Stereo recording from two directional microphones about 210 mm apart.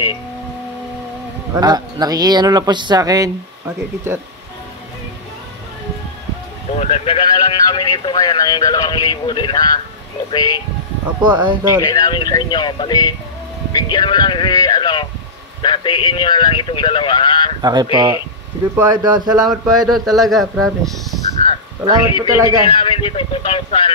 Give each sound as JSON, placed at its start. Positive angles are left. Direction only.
{"t": 1.5, "sound": "speech", "side_deg": -20}
{"t": 6.8, "sound": "speech", "side_deg": 25}
{"t": 11.2, "sound": "speech", "side_deg": -20}
{"t": 11.8, "sound": "speech", "side_deg": 20}
{"t": 17.6, "sound": "speech", "side_deg": -20}
{"t": 19.9, "sound": "speech", "side_deg": 0}
{"t": 22.0, "sound": "speech", "side_deg": 25}